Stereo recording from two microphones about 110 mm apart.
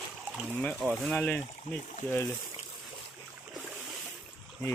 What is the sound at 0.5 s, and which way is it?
Speech, 15° left (ahead or behind).